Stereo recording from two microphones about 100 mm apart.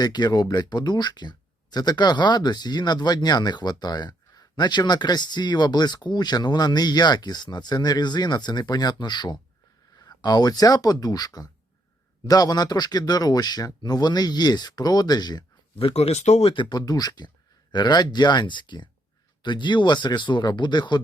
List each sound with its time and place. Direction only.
0.0 s speech: 45° left (ahead or behind)
15.8 s speech: 80° left; by 21.0 s 50° left (ahead or behind)